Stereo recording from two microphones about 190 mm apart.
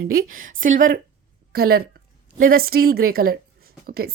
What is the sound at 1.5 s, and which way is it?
Speech, 55° right (ahead or behind).